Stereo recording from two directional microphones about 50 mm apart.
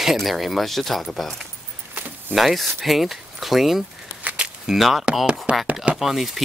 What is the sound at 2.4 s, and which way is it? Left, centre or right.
Speech, centre.